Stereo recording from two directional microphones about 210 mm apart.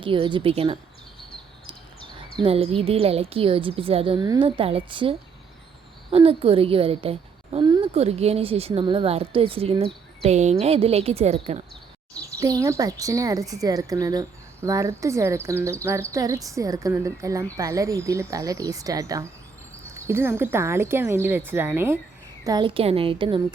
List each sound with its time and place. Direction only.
0.0 s a woman's voice: 25° right (ahead or behind)
2.4 s a woman's voice: 25° right (ahead or behind)
12.2 s speech: 15° right (ahead or behind)
22.4 s a woman's voice: 20° right (ahead or behind)